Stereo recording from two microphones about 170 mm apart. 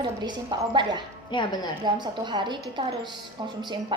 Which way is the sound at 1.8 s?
25° right (ahead or behind).